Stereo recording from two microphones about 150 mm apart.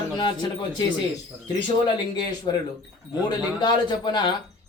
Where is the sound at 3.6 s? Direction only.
30° left (ahead or behind).